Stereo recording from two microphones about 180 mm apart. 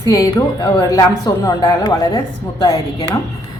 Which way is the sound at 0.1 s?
20° left (ahead or behind).